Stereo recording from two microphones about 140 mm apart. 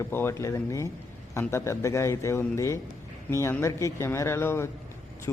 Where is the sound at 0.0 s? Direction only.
15° left (ahead or behind).